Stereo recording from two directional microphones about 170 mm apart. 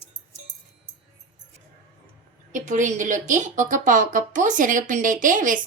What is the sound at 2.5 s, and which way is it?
Speech, 45° right (ahead or behind).